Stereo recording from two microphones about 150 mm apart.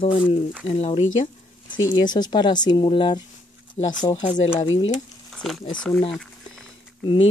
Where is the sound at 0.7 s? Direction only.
50° left (ahead or behind).